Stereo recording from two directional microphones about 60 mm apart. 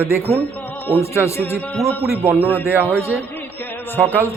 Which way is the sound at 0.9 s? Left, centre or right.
Left.